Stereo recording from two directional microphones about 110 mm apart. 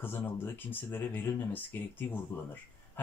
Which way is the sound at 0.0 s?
20° left (ahead or behind).